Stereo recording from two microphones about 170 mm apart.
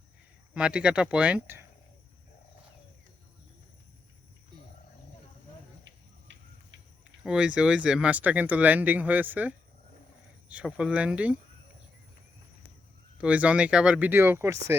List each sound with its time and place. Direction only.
0.5 s speech: 5° right (ahead or behind)
5.8 s a sound: 90° right
7.3 s speech: 5° right (ahead or behind)
13.1 s speech: 10° right (ahead or behind)